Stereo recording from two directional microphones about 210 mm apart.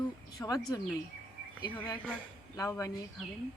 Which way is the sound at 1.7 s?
10° left (ahead or behind).